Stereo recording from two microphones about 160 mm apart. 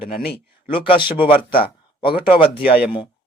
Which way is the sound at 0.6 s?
35° left (ahead or behind).